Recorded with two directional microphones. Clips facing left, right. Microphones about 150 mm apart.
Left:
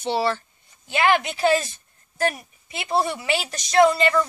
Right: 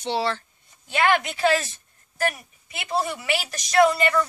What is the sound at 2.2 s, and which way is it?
A woman's voice, 30° left (ahead or behind).